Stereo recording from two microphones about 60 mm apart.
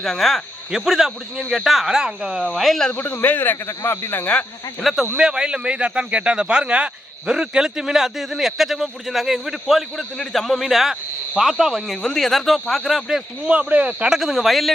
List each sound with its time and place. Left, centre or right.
0.0 s speech: centre
0.7 s speech: centre
2.4 s speech: centre
2.9 s speech: left
4.2 s speech: left
4.8 s speech: centre
5.1 s speech: centre
13.4 s speech: centre
14.1 s speech: centre